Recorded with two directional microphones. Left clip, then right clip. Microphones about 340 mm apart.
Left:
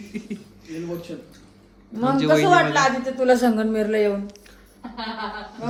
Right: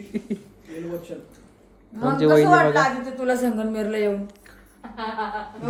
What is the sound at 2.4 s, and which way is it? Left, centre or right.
Speech, centre.